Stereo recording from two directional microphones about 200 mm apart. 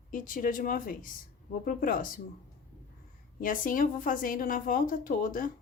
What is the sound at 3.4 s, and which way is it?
Speech, 45° left (ahead or behind).